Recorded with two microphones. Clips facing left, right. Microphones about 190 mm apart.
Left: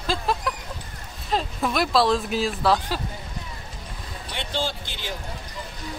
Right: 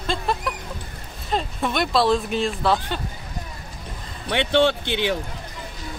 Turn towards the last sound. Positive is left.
turn(degrees=-70)  # may be behind; listen again after turning